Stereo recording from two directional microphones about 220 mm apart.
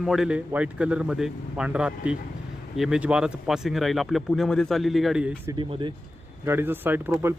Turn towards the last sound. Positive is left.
turn(degrees=-10)  # may be behind; listen again after turning